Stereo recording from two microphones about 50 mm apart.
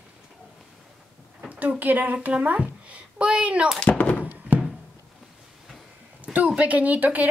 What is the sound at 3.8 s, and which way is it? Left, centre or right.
Thunk, left.